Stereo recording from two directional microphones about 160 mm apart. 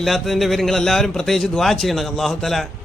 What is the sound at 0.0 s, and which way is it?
A man's voice, centre (ahead or behind).